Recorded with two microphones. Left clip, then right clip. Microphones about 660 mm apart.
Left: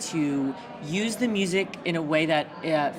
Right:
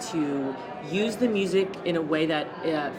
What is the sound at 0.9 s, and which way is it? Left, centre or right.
Speech, left.